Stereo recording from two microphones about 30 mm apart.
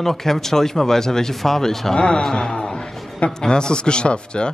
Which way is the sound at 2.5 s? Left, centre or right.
Left.